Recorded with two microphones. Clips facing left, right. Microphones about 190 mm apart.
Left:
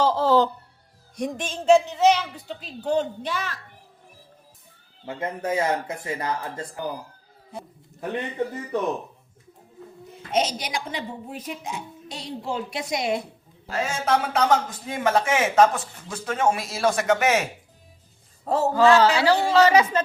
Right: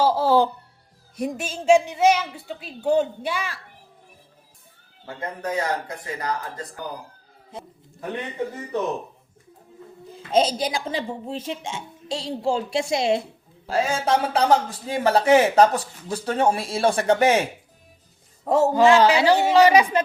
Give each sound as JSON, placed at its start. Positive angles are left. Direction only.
{"t": 0.0, "sound": "music", "side_deg": -10}
{"t": 1.1, "sound": "a woman's voice", "side_deg": -5}
{"t": 5.0, "sound": "a man's voice", "side_deg": 25}
{"t": 10.1, "sound": "a woman's voice", "side_deg": -30}
{"t": 18.4, "sound": "a woman's voice", "side_deg": -15}